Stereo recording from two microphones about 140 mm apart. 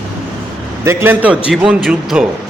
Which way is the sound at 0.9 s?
15° right (ahead or behind).